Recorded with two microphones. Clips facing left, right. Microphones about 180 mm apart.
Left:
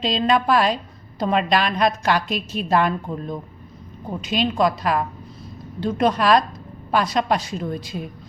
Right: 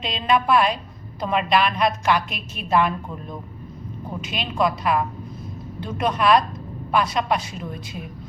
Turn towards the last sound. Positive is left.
turn(degrees=35)  # may be behind; listen again after turning